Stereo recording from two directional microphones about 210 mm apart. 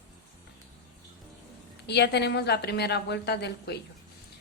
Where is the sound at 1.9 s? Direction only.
55° left (ahead or behind).